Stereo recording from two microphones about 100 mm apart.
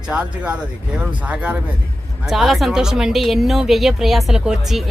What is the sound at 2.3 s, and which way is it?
Speech, centre (ahead or behind).